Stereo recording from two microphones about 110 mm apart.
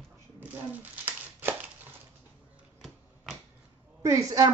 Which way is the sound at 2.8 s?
Centre (ahead or behind).